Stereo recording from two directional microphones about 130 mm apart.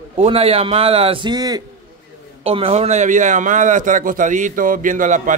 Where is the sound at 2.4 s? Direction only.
50° right (ahead or behind).